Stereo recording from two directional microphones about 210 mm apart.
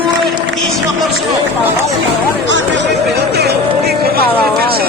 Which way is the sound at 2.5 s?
60° right (ahead or behind).